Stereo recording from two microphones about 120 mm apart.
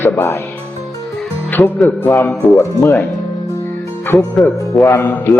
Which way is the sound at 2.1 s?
20° left (ahead or behind).